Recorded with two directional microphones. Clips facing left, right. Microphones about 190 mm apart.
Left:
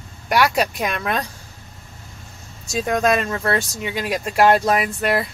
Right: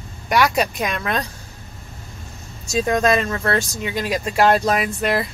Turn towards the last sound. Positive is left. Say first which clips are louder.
# even
turn(degrees=5)  # may be behind; listen again after turning